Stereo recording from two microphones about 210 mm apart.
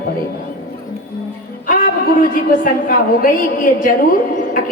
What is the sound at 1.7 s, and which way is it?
Speech, 40° left (ahead or behind).